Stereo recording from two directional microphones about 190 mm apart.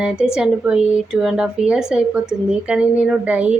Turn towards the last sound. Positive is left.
turn(degrees=-5)  # may be behind; listen again after turning